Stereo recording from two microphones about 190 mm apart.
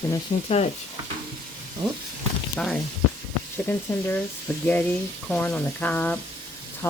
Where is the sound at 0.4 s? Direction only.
35° left (ahead or behind).